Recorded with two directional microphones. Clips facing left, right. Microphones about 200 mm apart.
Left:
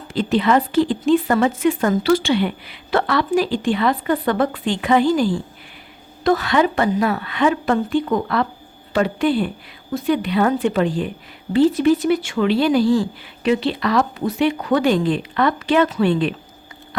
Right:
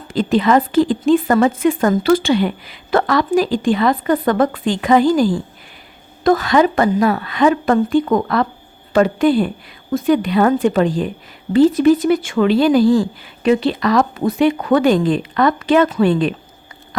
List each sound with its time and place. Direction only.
0.1 s speech: 45° right (ahead or behind)